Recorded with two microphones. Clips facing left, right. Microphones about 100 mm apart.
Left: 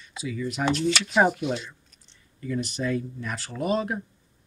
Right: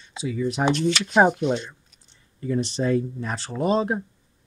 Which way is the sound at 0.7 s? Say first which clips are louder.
Right 2 dB; centre (ahead or behind).